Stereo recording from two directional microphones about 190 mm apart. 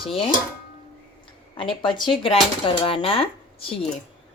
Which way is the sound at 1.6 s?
25° left (ahead or behind).